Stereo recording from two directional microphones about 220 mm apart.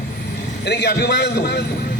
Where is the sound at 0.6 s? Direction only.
50° left (ahead or behind).